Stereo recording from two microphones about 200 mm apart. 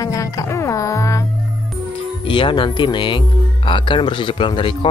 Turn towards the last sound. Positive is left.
turn(degrees=25)  # may be behind; listen again after turning